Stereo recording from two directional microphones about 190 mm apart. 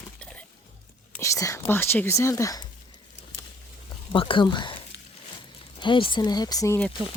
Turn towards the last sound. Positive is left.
turn(degrees=15)  # may be behind; listen again after turning